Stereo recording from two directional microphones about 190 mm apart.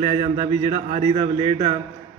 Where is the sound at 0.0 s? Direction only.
30° right (ahead or behind).